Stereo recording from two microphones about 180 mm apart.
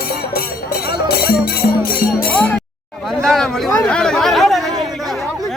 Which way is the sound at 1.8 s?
55° left (ahead or behind).